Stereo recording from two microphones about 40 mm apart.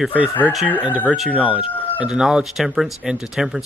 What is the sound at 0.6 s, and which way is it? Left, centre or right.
Speech, right.